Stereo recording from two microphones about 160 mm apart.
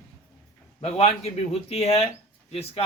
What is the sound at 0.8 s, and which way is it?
Speech, 40° left (ahead or behind).